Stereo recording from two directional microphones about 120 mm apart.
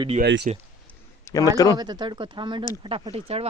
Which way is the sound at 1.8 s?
35° right (ahead or behind).